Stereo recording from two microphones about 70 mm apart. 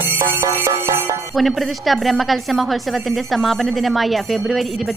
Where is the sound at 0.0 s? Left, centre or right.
Right.